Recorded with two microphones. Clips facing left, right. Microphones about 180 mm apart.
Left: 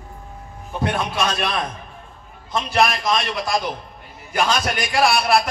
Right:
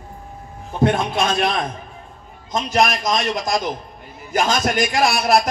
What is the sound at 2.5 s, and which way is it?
A man's voice, 40° right (ahead or behind).